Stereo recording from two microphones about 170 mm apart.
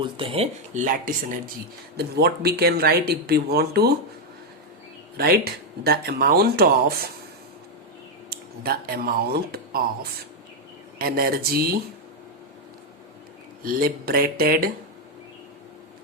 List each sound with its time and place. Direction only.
0.0 s speech: 30° right (ahead or behind)
0.7 s speech: 50° right (ahead or behind)
2.0 s speech: 70° right (ahead or behind)
5.1 s speech: 65° right (ahead or behind)
8.3 s speech: 65° right (ahead or behind)
13.6 s speech: 55° right (ahead or behind)